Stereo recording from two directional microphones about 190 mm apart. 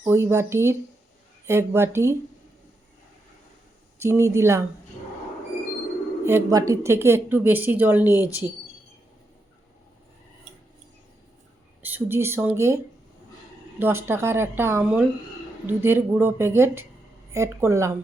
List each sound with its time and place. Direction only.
0.0 s a woman's voice: 15° right (ahead or behind)
4.0 s a woman's voice: 15° right (ahead or behind)
6.2 s a woman's voice: 15° right (ahead or behind)
11.8 s a woman's voice: 10° right (ahead or behind)